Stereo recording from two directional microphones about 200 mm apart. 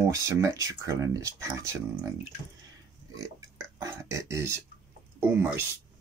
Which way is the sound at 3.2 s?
15° right (ahead or behind).